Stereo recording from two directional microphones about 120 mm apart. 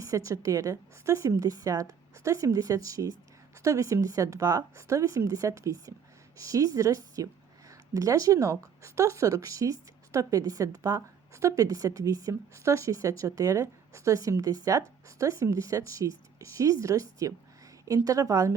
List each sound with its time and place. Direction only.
0.0 s speech: 25° right (ahead or behind)